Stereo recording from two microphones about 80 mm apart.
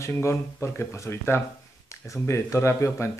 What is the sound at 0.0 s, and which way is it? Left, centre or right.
Speech, left.